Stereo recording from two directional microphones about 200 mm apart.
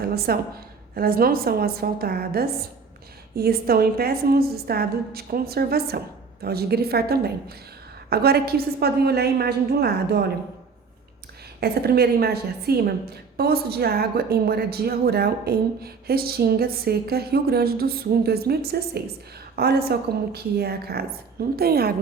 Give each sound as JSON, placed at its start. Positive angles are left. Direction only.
{"t": 0.0, "sound": "a woman's voice", "side_deg": -50}
{"t": 11.6, "sound": "speech", "side_deg": -50}